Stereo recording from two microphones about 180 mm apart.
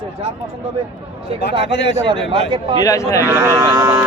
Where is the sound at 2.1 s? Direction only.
25° right (ahead or behind).